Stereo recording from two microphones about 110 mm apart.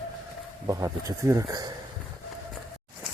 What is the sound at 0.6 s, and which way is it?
Speech, 30° right (ahead or behind).